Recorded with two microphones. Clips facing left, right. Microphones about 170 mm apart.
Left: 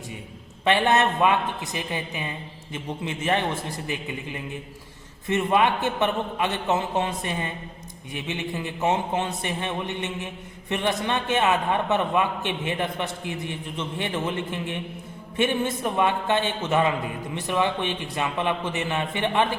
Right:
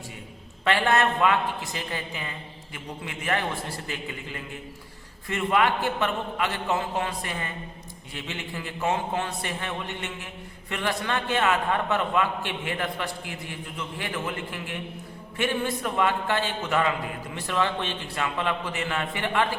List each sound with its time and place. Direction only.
0.6 s a man's voice: 20° left (ahead or behind)